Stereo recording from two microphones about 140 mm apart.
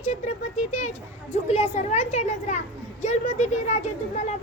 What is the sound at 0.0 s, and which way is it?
Speech, 60° left (ahead or behind).